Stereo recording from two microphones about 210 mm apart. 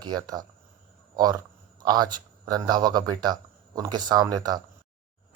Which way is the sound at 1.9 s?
20° right (ahead or behind).